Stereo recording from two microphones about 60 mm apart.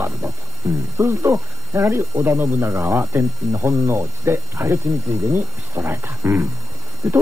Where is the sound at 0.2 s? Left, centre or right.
Right.